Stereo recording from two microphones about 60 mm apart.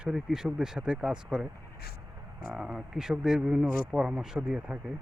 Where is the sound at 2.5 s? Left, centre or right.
Centre.